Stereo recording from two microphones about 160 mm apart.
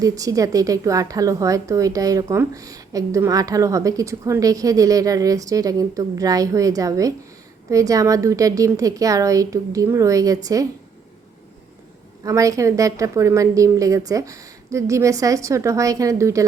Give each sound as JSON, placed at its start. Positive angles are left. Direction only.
{"t": 0.0, "sound": "a woman's voice", "side_deg": -20}
{"t": 12.2, "sound": "a woman's voice", "side_deg": -20}